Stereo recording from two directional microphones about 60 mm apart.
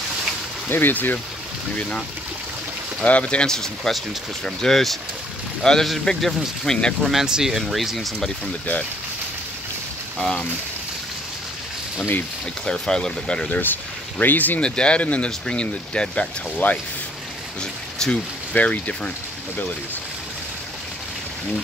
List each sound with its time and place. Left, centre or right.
0.7 s speech: left
3.0 s speech: centre
7.1 s speech: centre
10.1 s speech: centre
12.6 s speech: centre
14.1 s speech: left
14.6 s speech: centre
17.6 s speech: centre
18.5 s speech: left